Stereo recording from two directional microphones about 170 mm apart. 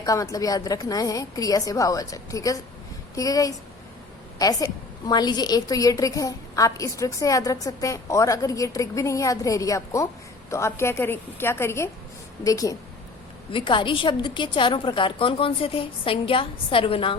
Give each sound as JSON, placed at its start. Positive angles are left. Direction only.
{"t": 0.0, "sound": "a woman's voice", "side_deg": 20}